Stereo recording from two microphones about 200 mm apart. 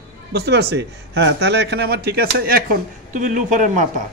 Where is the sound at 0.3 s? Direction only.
55° right (ahead or behind).